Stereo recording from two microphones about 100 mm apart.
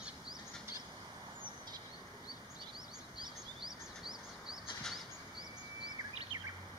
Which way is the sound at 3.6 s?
5° right (ahead or behind).